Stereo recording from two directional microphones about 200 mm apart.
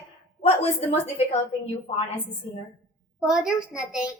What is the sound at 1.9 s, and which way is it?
Speech, 30° left (ahead or behind).